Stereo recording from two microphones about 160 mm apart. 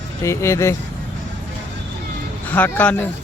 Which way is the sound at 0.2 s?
15° left (ahead or behind).